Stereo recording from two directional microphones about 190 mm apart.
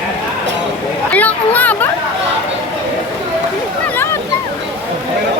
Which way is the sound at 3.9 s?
15° left (ahead or behind).